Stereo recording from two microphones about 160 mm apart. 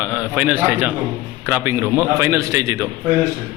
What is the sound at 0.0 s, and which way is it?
A man's voice, 10° right (ahead or behind).